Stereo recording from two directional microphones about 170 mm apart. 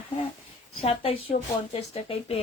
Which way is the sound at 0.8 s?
35° left (ahead or behind).